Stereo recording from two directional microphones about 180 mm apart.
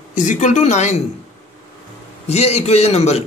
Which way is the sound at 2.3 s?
35° left (ahead or behind).